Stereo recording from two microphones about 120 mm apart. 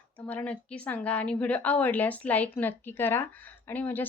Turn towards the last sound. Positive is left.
turn(degrees=15)  # may be behind; listen again after turning